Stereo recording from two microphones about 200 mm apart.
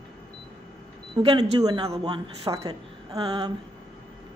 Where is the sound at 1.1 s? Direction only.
20° right (ahead or behind).